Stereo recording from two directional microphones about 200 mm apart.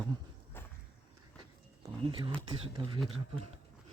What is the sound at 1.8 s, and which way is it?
Speech, 25° right (ahead or behind).